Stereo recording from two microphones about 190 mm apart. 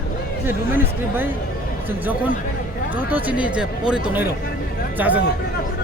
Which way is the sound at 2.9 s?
10° right (ahead or behind).